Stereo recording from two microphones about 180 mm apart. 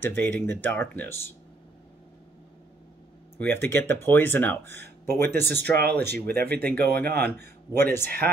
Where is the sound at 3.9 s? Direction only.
10° left (ahead or behind).